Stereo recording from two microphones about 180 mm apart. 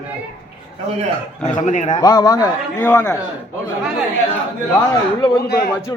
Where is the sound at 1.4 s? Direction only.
45° left (ahead or behind).